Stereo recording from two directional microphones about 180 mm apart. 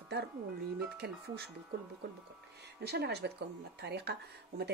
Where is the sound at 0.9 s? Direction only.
65° right (ahead or behind).